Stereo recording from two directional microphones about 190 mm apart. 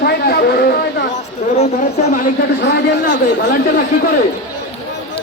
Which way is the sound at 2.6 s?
55° left (ahead or behind).